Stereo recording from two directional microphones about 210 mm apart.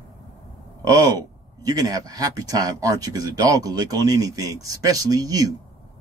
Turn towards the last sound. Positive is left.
turn(degrees=-15)  # may be behind; listen again after turning